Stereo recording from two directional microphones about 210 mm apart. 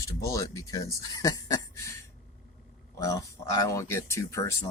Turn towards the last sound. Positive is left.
turn(degrees=15)  # may be behind; listen again after turning